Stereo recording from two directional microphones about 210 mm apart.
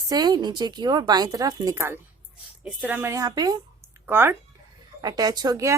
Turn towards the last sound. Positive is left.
turn(degrees=-15)  # may be behind; listen again after turning